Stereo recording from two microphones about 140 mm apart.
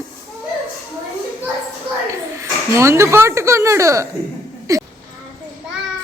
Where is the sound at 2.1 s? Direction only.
20° right (ahead or behind).